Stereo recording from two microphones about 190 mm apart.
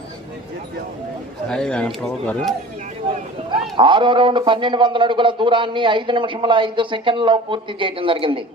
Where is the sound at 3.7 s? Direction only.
25° right (ahead or behind).